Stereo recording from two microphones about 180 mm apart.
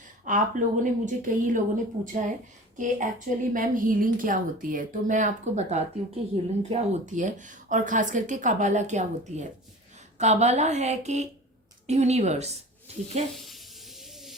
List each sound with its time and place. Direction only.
0.3 s speech: 45° right (ahead or behind)
13.3 s stir: centre (ahead or behind)